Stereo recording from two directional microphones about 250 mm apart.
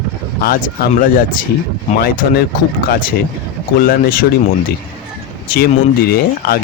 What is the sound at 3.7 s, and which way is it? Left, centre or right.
Speech, left.